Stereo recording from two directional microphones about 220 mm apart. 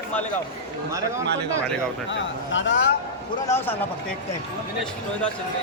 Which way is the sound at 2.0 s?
55° left (ahead or behind).